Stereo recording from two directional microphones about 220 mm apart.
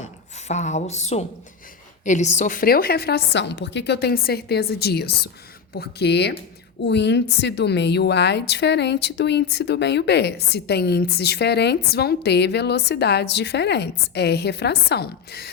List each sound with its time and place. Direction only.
0.4 s a woman's voice: 30° left (ahead or behind)